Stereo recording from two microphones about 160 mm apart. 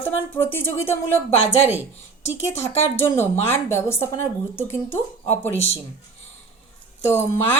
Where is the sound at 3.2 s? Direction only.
15° left (ahead or behind).